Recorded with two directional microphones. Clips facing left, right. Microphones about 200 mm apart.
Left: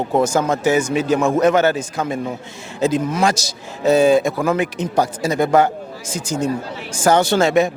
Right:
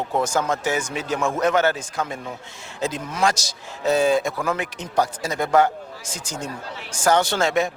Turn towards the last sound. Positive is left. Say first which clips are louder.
# left 6 dB
turn(degrees=10)  # may be behind; listen again after turning